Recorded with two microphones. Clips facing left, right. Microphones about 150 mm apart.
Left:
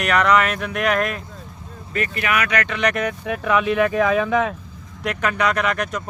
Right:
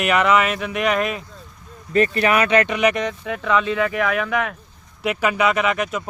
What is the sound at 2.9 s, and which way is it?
Speech, 5° left (ahead or behind).